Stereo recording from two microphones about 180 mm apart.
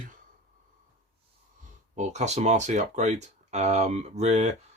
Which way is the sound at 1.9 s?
40° right (ahead or behind).